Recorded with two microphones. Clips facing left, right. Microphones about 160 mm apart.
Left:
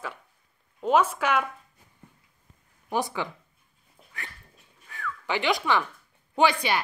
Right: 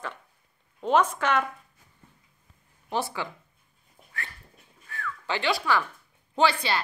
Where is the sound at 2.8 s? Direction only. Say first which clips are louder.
Left 2 dB; 15° left (ahead or behind).